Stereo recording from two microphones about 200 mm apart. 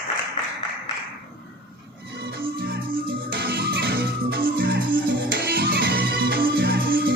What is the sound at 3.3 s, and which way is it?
Music, 50° right (ahead or behind).